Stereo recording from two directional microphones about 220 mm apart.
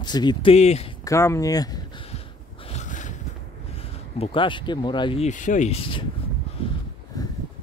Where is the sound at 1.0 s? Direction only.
15° left (ahead or behind); by 3.2 s 35° left (ahead or behind).